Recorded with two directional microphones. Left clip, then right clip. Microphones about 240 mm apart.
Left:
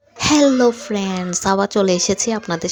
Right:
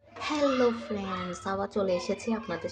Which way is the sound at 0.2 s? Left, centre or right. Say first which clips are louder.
Left 12 dB; left.